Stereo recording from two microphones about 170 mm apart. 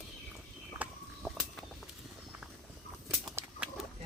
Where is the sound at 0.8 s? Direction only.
Centre (ahead or behind).